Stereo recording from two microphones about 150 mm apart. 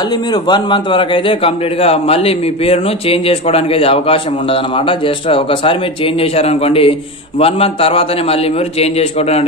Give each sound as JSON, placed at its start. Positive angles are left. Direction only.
{"t": 0.1, "sound": "a man's voice", "side_deg": 30}